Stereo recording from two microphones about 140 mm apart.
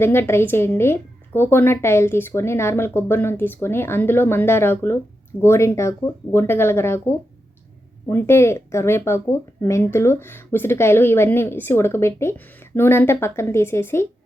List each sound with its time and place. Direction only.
0.0 s speech: 15° left (ahead or behind)